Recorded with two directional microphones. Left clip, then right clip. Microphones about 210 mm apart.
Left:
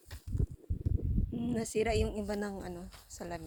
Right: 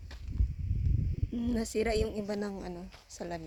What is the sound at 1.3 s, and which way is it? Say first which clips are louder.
A woman's voice: right 1 dB; 15° right (ahead or behind).